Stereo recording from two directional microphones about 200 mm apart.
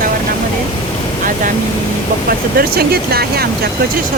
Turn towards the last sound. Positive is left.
turn(degrees=-50)  # may be behind; listen again after turning